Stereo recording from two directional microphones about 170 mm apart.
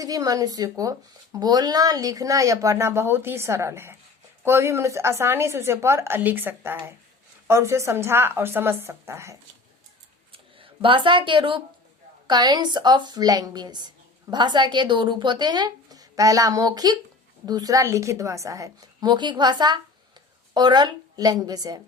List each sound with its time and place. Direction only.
0.0 s a woman's voice: 20° right (ahead or behind)
10.3 s a woman's voice: 30° right (ahead or behind)